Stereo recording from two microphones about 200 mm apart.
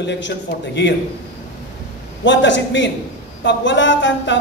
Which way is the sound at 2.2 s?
65° left (ahead or behind).